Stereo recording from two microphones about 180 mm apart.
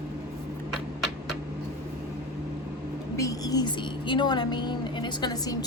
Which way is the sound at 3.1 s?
20° left (ahead or behind).